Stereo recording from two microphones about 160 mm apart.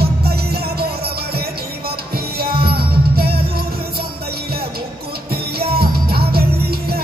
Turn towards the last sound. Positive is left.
turn(degrees=-75)  # may be behind; listen again after turning